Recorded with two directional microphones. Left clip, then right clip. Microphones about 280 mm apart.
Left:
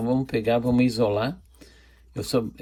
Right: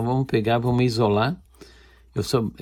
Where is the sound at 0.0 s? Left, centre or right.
Right.